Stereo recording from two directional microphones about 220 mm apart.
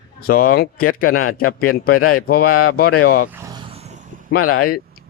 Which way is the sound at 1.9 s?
90° left.